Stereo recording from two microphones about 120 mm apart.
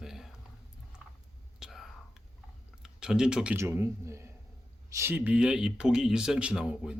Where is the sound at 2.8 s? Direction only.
5° right (ahead or behind).